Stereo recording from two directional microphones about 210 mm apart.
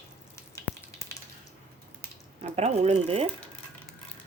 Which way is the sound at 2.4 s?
30° right (ahead or behind).